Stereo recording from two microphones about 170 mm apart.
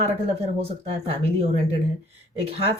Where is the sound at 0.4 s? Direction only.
35° right (ahead or behind).